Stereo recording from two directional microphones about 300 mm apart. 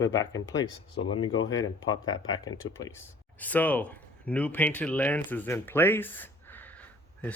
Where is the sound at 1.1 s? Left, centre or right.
Left.